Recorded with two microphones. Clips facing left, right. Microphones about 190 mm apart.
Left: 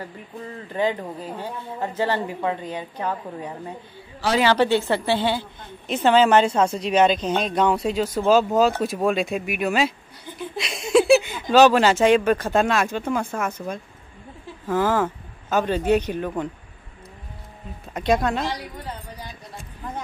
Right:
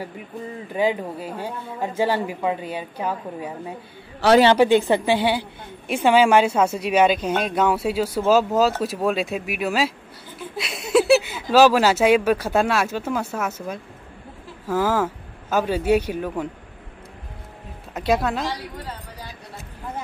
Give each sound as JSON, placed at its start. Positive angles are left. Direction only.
{"t": 0.7, "sound": "a woman's voice", "side_deg": -10}
{"t": 4.2, "sound": "a woman's voice", "side_deg": -65}
{"t": 4.6, "sound": "a woman's voice", "side_deg": -15}
{"t": 17.9, "sound": "speech", "side_deg": -5}